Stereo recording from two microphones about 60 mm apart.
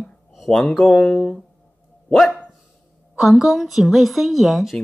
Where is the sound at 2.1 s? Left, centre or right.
Centre.